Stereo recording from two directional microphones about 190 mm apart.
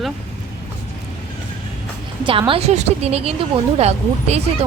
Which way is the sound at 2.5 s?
35° right (ahead or behind).